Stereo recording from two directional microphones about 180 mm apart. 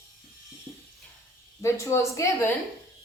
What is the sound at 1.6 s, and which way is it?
Speech, 15° left (ahead or behind).